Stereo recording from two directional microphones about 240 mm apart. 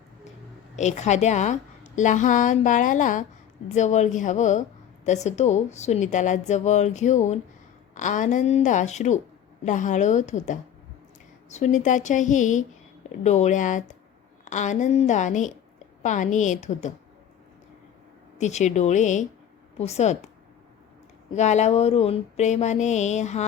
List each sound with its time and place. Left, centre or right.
0.8 s a woman's voice: left
18.3 s a woman's voice: left
21.3 s a woman's voice: left